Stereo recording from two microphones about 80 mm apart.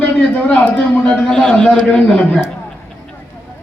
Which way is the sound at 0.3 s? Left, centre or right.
Centre.